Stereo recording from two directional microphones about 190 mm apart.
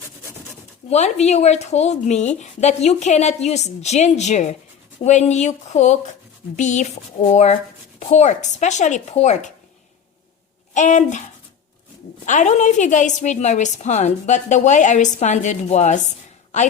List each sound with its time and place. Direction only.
0.9 s a woman's voice: 35° left (ahead or behind)
10.8 s a woman's voice: 40° left (ahead or behind)
12.2 s a woman's voice: 40° left (ahead or behind)